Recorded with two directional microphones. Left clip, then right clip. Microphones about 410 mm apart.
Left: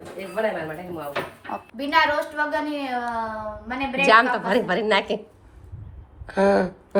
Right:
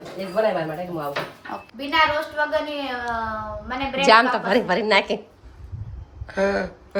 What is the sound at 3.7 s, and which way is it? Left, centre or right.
A woman's voice, centre.